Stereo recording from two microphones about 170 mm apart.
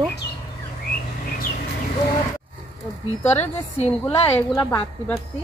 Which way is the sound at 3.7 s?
40° left (ahead or behind).